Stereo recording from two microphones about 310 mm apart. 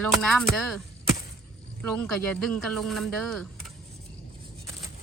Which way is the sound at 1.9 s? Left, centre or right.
Centre.